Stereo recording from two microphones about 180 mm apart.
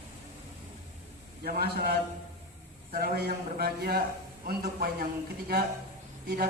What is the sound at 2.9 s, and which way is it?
A man's voice, 60° right (ahead or behind).